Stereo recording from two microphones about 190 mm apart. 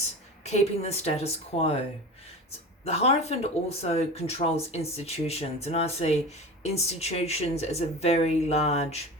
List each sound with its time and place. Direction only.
0.4 s speech: 35° left (ahead or behind)
2.8 s speech: 35° left (ahead or behind)